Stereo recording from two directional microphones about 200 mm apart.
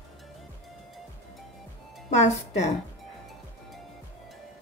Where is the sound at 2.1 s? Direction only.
35° left (ahead or behind).